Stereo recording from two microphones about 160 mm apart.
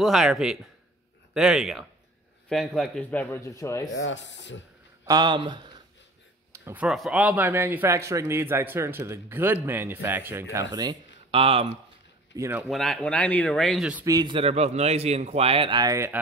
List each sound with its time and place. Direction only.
0.0 s a man's voice: 5° right (ahead or behind); by 3.9 s 20° left (ahead or behind)
3.9 s speech: 90° left
5.0 s a man's voice: 25° right (ahead or behind)
6.5 s a sound: 15° right (ahead or behind)
6.9 s a man's voice: 5° right (ahead or behind); by 11.7 s 35° right (ahead or behind)
12.4 s a man's voice: 15° right (ahead or behind)
12.6 s speech: centre (ahead or behind)
14.0 s a man's voice: 25° right (ahead or behind)